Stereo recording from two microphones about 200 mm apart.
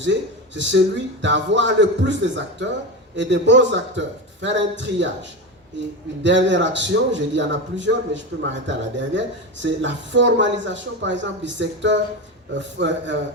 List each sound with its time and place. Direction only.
0.0 s speech: 65° right (ahead or behind)
6.2 s speech: 65° right (ahead or behind)